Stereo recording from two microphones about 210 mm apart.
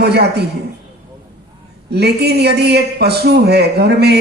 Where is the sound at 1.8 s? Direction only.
50° right (ahead or behind).